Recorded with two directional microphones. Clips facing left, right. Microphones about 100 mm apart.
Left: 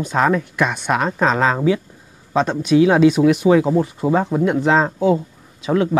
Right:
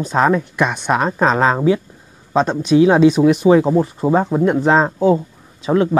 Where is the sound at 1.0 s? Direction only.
40° right (ahead or behind).